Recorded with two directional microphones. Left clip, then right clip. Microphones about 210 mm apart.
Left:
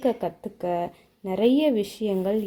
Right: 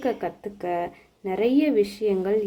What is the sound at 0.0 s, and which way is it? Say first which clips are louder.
A woman's voice: left 1 dB; 35° left (ahead or behind).